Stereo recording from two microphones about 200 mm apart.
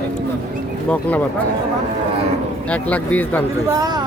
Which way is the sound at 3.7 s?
20° right (ahead or behind).